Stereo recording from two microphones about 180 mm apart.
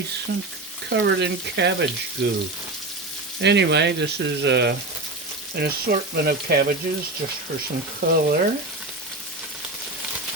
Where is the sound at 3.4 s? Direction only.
70° right (ahead or behind).